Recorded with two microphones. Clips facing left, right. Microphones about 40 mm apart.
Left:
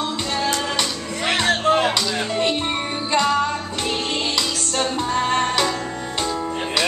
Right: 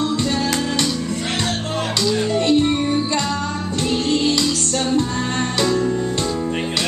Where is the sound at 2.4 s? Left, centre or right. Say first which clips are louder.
Right 5 dB; left.